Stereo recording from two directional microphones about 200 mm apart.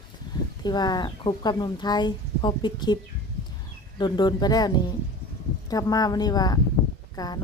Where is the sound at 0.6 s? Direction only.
20° left (ahead or behind).